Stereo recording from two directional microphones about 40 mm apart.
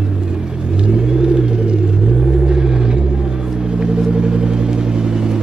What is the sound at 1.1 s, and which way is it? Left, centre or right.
Rumble, centre.